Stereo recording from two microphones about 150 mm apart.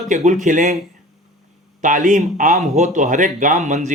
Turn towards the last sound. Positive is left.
turn(degrees=-50)  # may be behind; listen again after turning